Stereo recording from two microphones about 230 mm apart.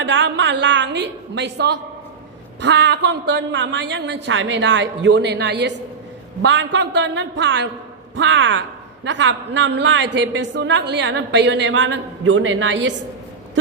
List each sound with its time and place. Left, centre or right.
0.0 s a woman's voice: right